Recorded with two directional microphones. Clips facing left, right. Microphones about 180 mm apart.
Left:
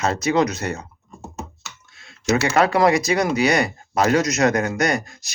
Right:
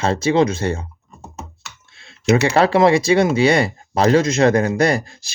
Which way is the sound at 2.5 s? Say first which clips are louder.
Right 2 dB; 30° right (ahead or behind).